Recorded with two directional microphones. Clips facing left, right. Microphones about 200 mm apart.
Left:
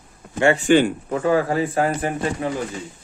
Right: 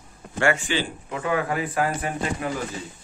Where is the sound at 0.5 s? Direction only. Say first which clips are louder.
Left 12 dB; 45° left (ahead or behind); by 2.5 s 25° left (ahead or behind).